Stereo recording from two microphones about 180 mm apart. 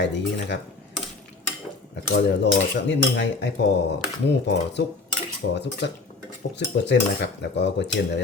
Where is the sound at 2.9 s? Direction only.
75° left (ahead or behind).